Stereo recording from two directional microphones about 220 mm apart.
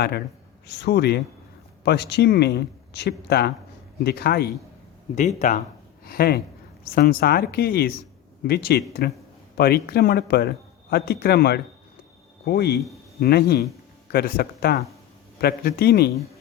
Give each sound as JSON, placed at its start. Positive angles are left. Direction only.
{"t": 0.7, "sound": "speech", "side_deg": 50}
{"t": 5.4, "sound": "speech", "side_deg": 35}
{"t": 6.1, "sound": "speech", "side_deg": 45}